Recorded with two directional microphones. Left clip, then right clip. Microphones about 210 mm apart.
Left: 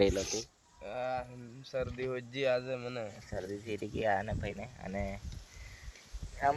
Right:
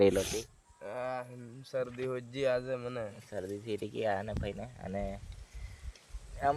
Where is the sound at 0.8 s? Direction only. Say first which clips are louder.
Left 1 dB; 30° right (ahead or behind).